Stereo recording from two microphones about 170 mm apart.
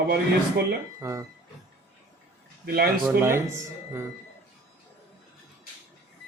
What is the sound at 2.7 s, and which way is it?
Speech, 65° right (ahead or behind).